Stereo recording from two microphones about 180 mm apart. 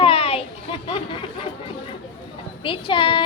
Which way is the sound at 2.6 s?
30° left (ahead or behind).